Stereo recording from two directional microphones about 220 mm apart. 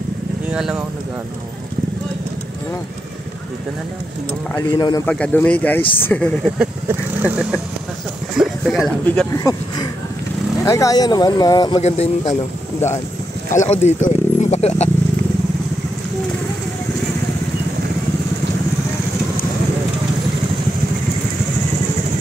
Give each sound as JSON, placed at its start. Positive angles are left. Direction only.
{"t": 0.5, "sound": "speech", "side_deg": -5}
{"t": 4.6, "sound": "speech", "side_deg": 15}
{"t": 5.0, "sound": "speech", "side_deg": 5}
{"t": 6.9, "sound": "speech", "side_deg": -5}
{"t": 9.3, "sound": "speech", "side_deg": 15}
{"t": 11.8, "sound": "speech", "side_deg": 30}
{"t": 13.7, "sound": "speech", "side_deg": 30}